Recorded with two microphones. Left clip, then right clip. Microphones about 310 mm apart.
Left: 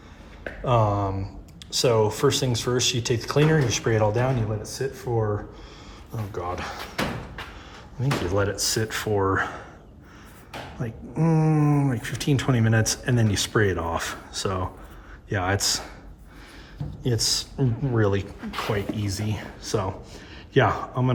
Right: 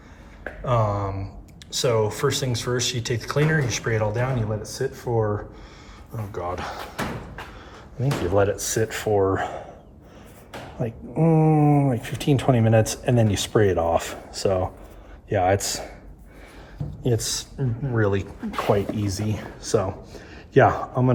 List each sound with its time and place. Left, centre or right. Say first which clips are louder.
0.4 s speech: left 1 dB; centre
8.0 s speech: right 4 dB; centre
10.8 s speech: right 6 dB; centre